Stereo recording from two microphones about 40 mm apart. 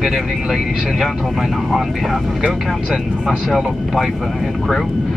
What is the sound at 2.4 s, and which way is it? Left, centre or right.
Speech, centre.